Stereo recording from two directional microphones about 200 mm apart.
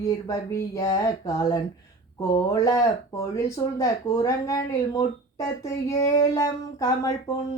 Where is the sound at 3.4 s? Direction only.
15° left (ahead or behind).